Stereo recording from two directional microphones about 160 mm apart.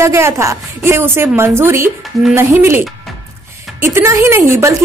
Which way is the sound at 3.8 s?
15° right (ahead or behind).